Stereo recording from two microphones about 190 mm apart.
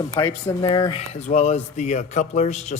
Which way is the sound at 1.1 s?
35° left (ahead or behind).